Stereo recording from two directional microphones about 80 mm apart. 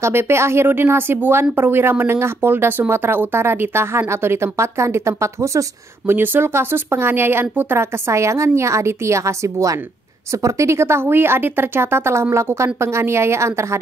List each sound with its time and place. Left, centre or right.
0.0 s speech: right
6.1 s speech: right